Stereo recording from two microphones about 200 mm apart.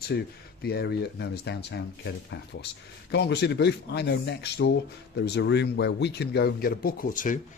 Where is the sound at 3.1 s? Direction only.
55° left (ahead or behind).